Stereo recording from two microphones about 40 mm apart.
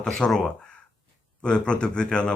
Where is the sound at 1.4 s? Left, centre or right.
Left.